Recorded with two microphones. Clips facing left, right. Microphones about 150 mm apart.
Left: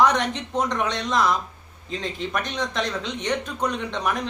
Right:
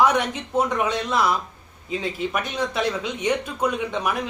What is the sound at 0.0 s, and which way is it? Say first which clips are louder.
Speech: even; 10° right (ahead or behind).